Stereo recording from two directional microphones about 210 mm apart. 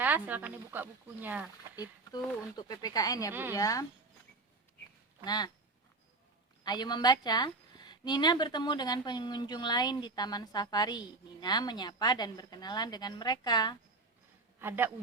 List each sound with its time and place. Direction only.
0.0 s speech: 10° right (ahead or behind)
2.1 s speech: 20° left (ahead or behind)
5.2 s a woman's voice: 20° left (ahead or behind)
6.7 s a woman's voice: 20° left (ahead or behind)
14.6 s speech: 10° right (ahead or behind)